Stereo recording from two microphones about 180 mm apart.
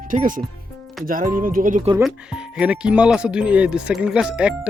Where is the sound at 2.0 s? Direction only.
5° right (ahead or behind).